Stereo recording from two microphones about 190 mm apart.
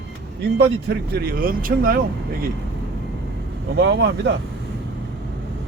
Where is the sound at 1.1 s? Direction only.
50° right (ahead or behind).